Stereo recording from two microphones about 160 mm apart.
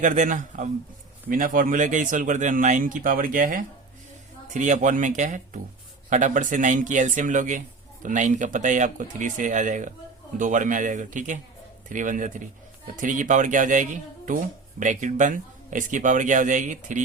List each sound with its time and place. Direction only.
0.0 s a man's voice: 50° right (ahead or behind)